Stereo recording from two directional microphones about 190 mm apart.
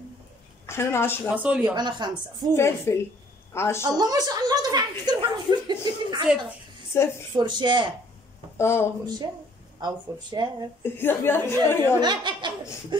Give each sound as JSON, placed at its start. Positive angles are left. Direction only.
{"t": 0.7, "sound": "speech", "side_deg": 15}
{"t": 1.3, "sound": "speech", "side_deg": -10}
{"t": 1.8, "sound": "speech", "side_deg": -25}
{"t": 2.5, "sound": "speech", "side_deg": 15}
{"t": 3.8, "sound": "speech", "side_deg": -20}
{"t": 6.9, "sound": "a woman's voice", "side_deg": 15}
{"t": 7.3, "sound": "speech", "side_deg": -25}
{"t": 8.5, "sound": "speech", "side_deg": 15}
{"t": 9.8, "sound": "speech", "side_deg": -20}
{"t": 10.8, "sound": "speech", "side_deg": 10}
{"t": 12.0, "sound": "speech", "side_deg": -25}